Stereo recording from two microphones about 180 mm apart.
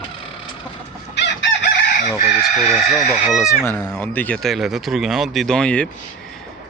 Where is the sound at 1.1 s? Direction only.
85° left.